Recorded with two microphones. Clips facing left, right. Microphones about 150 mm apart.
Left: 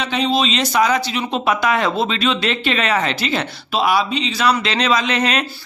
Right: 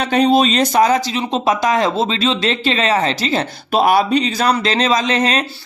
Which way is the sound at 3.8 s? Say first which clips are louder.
Right 4 dB; 45° right (ahead or behind).